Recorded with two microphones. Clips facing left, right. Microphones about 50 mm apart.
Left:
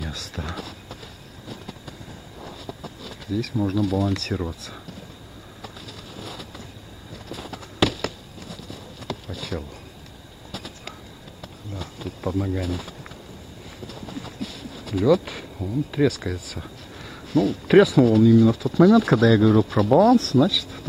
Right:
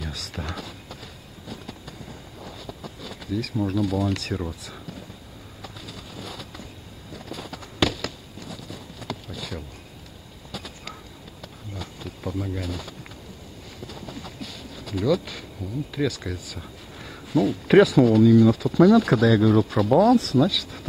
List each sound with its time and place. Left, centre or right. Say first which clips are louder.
0.0 s a sound: left 1 dB; centre
1.5 s vehicle: even; centre
2.4 s speech: left 2 dB; centre
5.6 s train: even; centre
7.2 s a sound: left 1 dB; centre
11.4 s insect: left 2 dB; centre
12.4 s speech: left 4 dB; centre
13.8 s a sound: left 2 dB; centre
15.2 s speech: left 4 dB; left
17.0 s speech: left 1 dB; centre